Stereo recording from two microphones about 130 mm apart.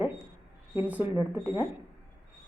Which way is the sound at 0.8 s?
15° right (ahead or behind).